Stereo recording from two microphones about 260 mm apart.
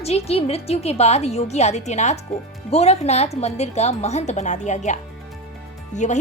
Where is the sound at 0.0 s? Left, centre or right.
Left.